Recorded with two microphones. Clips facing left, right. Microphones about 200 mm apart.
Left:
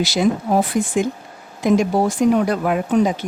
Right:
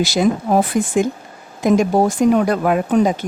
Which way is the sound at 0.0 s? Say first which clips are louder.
Right 2 dB; 45° right (ahead or behind).